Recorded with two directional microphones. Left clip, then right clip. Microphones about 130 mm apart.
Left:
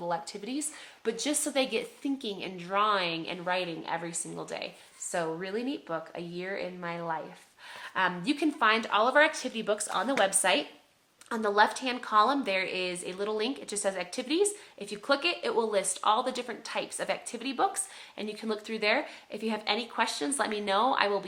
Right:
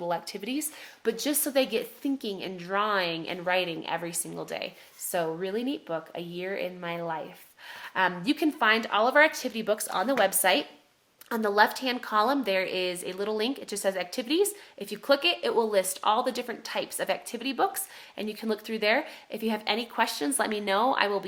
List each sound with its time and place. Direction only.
0.0 s a woman's voice: 40° right (ahead or behind)